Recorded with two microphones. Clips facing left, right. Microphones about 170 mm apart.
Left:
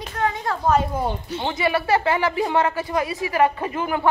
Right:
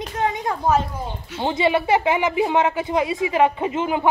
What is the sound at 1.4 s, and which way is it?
Speech, 20° right (ahead or behind).